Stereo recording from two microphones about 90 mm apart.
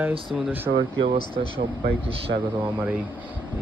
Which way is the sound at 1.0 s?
90° right.